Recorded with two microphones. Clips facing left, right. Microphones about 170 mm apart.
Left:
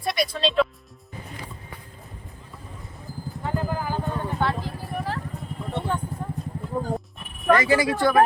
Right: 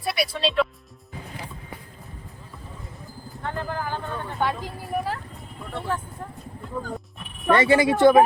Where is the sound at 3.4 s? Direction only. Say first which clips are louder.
Left 2 dB; 5° left (ahead or behind).